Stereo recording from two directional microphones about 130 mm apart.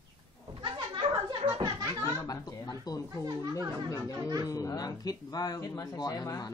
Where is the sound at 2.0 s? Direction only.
25° left (ahead or behind).